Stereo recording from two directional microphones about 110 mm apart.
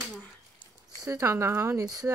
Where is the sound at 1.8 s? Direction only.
35° right (ahead or behind).